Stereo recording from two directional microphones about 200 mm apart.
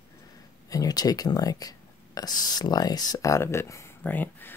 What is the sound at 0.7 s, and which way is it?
Speech, 20° left (ahead or behind).